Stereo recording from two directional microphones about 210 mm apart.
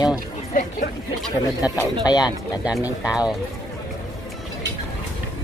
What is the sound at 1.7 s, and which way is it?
Speech, 15° left (ahead or behind).